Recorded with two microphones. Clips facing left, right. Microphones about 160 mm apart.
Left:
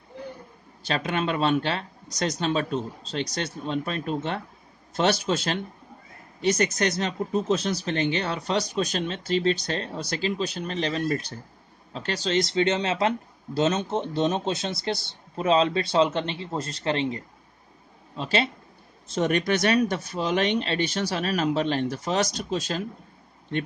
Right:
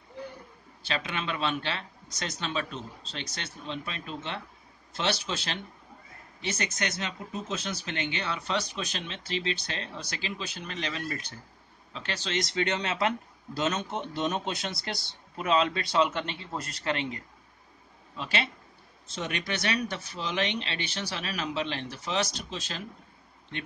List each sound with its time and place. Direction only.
0.8 s a man's voice: 45° left (ahead or behind)
19.0 s speech: 45° left (ahead or behind)